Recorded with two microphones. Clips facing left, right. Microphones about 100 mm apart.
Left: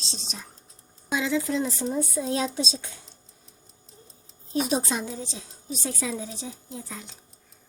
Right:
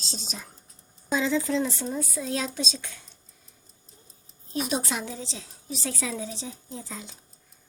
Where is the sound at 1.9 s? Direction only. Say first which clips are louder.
Left 3 dB; 25° left (ahead or behind).